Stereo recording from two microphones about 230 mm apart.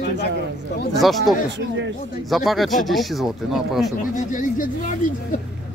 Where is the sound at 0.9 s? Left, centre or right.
Centre.